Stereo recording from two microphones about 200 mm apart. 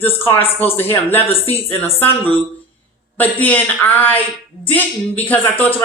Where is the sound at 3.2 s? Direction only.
10° left (ahead or behind).